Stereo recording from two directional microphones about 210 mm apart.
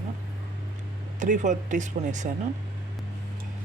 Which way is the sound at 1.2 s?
35° right (ahead or behind).